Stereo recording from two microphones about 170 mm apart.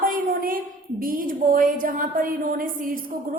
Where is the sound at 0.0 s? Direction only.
55° right (ahead or behind).